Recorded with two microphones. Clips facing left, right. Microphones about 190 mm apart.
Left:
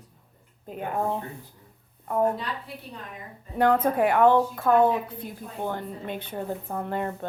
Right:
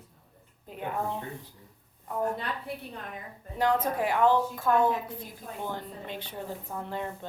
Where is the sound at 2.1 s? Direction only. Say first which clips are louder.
Left 7 dB; 60° left (ahead or behind).